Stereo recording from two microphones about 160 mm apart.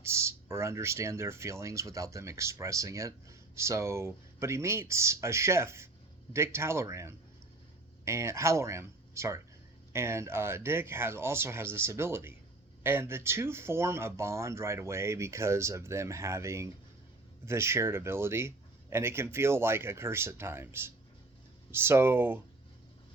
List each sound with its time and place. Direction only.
0.0 s speech: 15° right (ahead or behind)